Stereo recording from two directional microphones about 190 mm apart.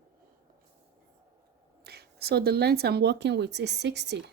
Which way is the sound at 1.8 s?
55° right (ahead or behind).